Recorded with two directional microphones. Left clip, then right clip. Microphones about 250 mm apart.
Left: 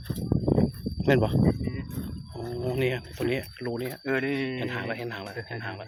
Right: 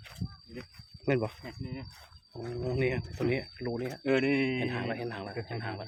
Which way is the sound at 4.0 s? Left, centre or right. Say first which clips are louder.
Right 1 dB; right.